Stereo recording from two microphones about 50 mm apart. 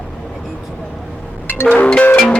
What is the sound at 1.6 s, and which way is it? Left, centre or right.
Music, left.